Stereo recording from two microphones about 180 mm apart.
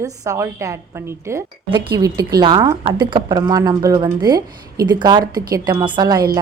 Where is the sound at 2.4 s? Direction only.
25° right (ahead or behind).